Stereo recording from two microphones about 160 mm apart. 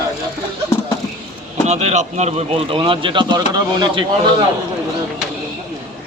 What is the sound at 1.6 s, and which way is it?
Speech, 45° right (ahead or behind).